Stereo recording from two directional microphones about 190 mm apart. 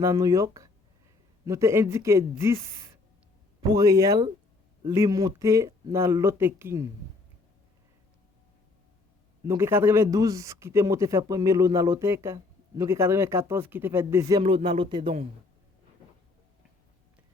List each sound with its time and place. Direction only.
0.0 s a man's voice: 15° right (ahead or behind)
3.6 s a man's voice: 20° right (ahead or behind)
9.4 s a man's voice: 15° right (ahead or behind)
14.4 s speech: 30° right (ahead or behind)